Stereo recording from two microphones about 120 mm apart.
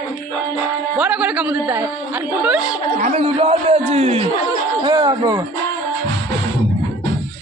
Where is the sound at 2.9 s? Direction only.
90° right.